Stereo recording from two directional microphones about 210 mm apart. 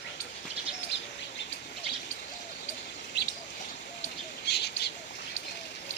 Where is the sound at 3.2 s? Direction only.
55° left (ahead or behind).